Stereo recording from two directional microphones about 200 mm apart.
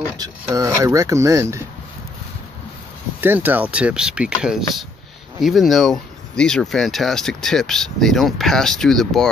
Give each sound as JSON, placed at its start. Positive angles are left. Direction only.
{"t": 0.2, "sound": "speech", "side_deg": -15}
{"t": 3.2, "sound": "speech", "side_deg": -10}